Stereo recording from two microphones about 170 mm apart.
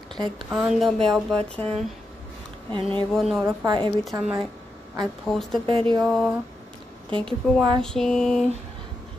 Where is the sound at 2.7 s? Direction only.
30° right (ahead or behind).